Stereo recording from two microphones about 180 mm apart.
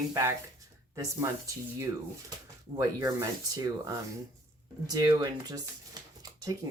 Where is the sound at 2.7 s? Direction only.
20° right (ahead or behind).